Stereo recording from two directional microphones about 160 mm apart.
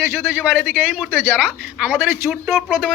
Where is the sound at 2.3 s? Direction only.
Centre (ahead or behind).